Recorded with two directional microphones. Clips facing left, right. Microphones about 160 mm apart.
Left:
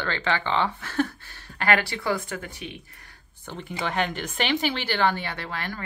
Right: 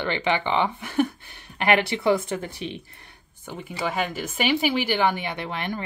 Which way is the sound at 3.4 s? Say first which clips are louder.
Right 2 dB; 10° right (ahead or behind).